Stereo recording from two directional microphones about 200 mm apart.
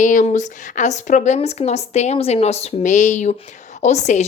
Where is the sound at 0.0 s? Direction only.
40° left (ahead or behind).